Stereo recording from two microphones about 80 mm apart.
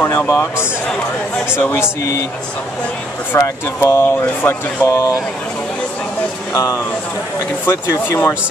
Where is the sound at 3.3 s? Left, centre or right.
Left.